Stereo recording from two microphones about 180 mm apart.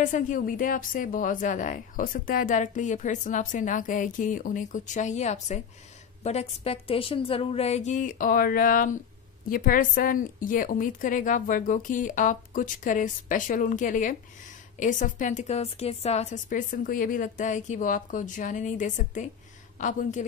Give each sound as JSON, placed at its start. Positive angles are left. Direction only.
{"t": 0.0, "sound": "a woman's voice", "side_deg": 45}